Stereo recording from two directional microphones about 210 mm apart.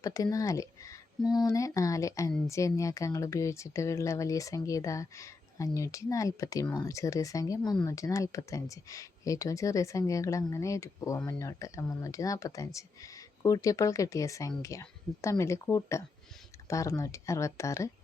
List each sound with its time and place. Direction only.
0.0 s speech: 15° left (ahead or behind)